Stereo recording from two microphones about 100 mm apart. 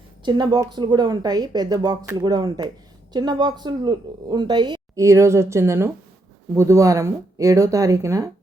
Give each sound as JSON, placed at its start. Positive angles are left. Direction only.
{"t": 0.3, "sound": "speech", "side_deg": -50}
{"t": 4.9, "sound": "speech", "side_deg": -30}